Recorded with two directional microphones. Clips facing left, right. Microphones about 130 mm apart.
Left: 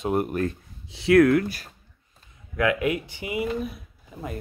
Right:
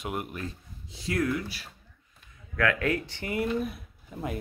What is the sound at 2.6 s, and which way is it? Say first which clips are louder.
Speech: left 3 dB; 15° left (ahead or behind).